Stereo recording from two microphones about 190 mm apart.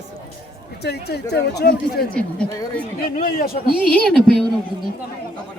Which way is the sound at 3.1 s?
50° left (ahead or behind).